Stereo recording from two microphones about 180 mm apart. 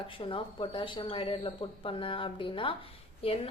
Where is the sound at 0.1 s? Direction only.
30° left (ahead or behind).